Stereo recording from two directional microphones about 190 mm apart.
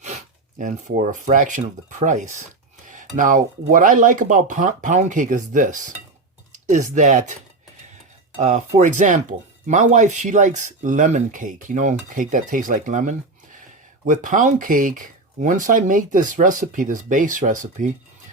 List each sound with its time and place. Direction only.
0.6 s speech: 40° right (ahead or behind)
8.4 s speech: 40° right (ahead or behind)